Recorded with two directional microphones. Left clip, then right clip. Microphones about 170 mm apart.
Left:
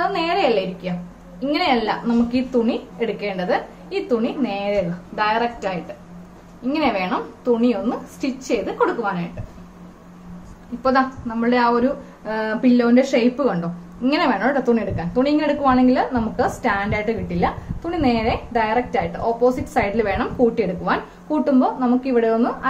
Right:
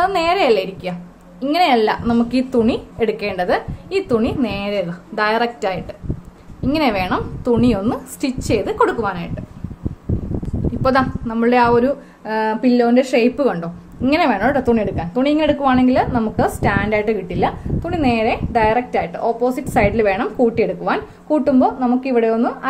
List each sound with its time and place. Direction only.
0.0 s a woman's voice: 70° right (ahead or behind)
10.8 s a woman's voice: 60° right (ahead or behind); by 22.7 s 40° right (ahead or behind)